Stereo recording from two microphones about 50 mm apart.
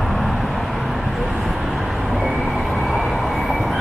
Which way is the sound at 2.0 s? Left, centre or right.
Centre.